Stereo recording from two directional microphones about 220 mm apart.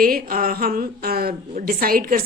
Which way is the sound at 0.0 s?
40° right (ahead or behind).